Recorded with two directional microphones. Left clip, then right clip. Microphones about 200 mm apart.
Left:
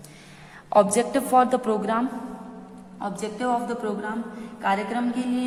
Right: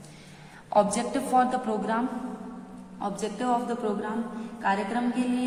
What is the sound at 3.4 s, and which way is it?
Speech, 30° left (ahead or behind).